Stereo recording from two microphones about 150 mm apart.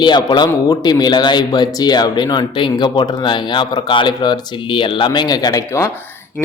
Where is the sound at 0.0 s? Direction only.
30° left (ahead or behind).